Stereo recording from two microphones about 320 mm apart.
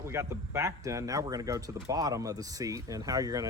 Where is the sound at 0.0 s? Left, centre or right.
Centre.